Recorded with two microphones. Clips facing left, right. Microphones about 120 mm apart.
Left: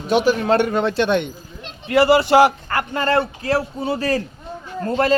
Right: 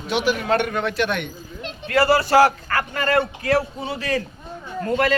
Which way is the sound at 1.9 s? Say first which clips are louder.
Left 3 dB; 15° left (ahead or behind).